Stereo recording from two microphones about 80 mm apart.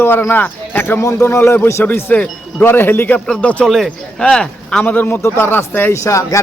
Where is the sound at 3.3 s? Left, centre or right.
Centre.